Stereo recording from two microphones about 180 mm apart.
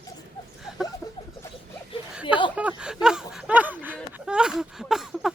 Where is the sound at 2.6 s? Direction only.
5° right (ahead or behind).